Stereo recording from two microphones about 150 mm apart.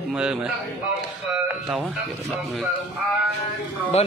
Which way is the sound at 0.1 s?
5° right (ahead or behind).